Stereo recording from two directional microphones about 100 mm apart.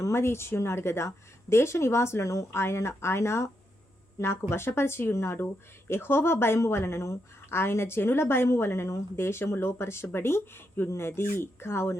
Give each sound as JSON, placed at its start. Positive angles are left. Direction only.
{"t": 0.0, "sound": "a woman's voice", "side_deg": 25}